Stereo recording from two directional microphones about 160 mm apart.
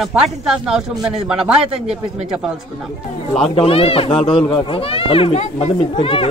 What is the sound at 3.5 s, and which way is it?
Speech, 35° left (ahead or behind).